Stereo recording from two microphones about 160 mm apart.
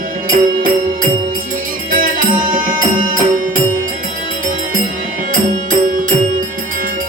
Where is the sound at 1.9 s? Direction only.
60° right (ahead or behind).